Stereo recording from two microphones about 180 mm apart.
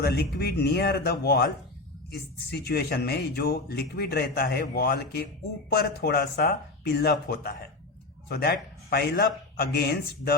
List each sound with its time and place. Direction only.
0.0 s speech: 60° left (ahead or behind)
2.5 s speech: 60° left (ahead or behind)